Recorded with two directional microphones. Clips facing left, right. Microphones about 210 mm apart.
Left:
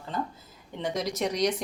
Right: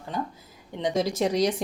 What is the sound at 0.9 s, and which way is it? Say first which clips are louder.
Speech: right 5 dB; 30° right (ahead or behind).